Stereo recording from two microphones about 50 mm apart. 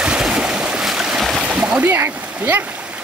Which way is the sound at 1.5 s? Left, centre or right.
Right.